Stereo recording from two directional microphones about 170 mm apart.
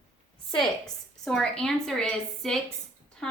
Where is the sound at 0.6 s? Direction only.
5° left (ahead or behind).